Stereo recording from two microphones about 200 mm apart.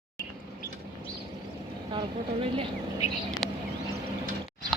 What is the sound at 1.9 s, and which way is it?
Vehicle, 25° right (ahead or behind).